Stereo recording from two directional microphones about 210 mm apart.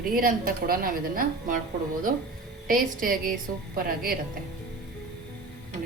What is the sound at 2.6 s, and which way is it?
A woman's voice, 40° right (ahead or behind).